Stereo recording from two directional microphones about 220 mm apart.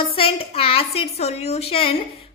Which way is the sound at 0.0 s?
25° left (ahead or behind).